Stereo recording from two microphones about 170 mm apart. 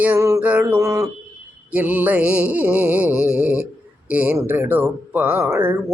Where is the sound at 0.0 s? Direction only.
15° right (ahead or behind).